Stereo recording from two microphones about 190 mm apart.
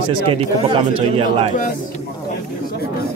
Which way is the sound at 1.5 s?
45° left (ahead or behind).